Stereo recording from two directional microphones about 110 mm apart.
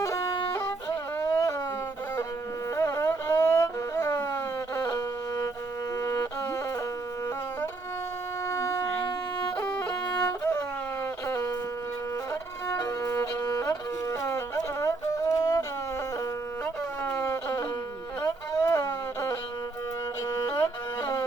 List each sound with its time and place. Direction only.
0.0 s wind instrument: 25° left (ahead or behind)
0.9 s a sound: 30° left (ahead or behind)
2.7 s music: 30° left (ahead or behind)
8.4 s shofar: 25° left (ahead or behind)
10.2 s music: 20° left (ahead or behind)
11.3 s wind instrument: 25° left (ahead or behind)
12.3 s violin: 25° left (ahead or behind)
17.0 s a sound: 25° left (ahead or behind)
20.3 s music: 30° left (ahead or behind)